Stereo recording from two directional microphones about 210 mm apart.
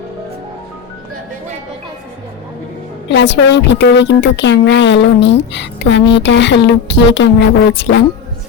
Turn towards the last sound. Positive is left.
turn(degrees=55)  # may be behind; listen again after turning